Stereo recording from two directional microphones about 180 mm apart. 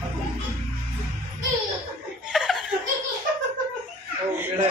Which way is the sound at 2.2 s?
5° right (ahead or behind).